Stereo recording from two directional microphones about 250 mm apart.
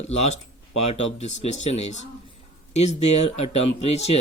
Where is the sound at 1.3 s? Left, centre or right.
Left.